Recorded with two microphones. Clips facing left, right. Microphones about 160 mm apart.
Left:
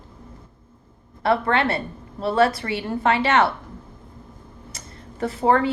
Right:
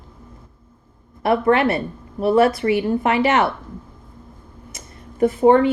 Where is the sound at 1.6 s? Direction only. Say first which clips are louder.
Right 4 dB; 20° right (ahead or behind).